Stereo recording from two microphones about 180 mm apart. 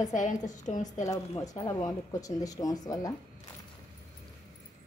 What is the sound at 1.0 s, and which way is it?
A woman's voice, 20° left (ahead or behind).